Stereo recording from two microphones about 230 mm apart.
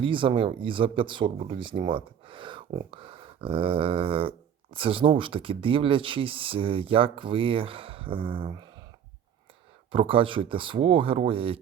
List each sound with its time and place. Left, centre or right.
0.0 s speech: right
9.9 s speech: right